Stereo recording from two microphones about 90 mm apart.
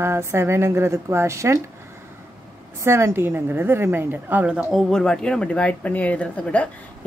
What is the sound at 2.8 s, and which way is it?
A woman's voice, 35° right (ahead or behind).